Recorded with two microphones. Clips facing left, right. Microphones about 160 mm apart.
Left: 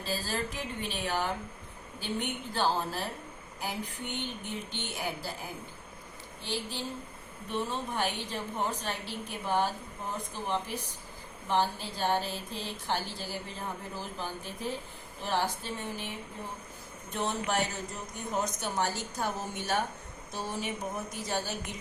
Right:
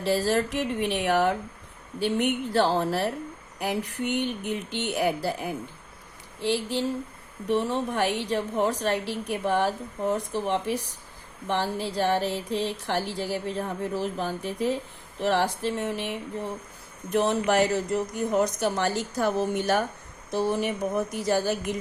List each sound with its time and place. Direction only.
0.0 s a woman's voice: 75° right (ahead or behind)